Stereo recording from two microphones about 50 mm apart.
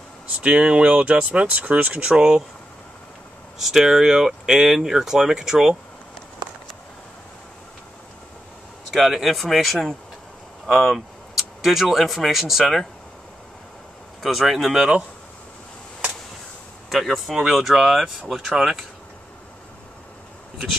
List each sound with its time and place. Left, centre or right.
0.4 s speech: right
2.1 s speech: centre
3.5 s speech: centre
8.9 s speech: centre
14.2 s speech: centre
16.9 s speech: centre